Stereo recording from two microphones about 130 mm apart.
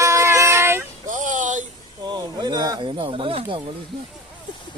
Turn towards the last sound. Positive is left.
turn(degrees=-45)  # may be behind; listen again after turning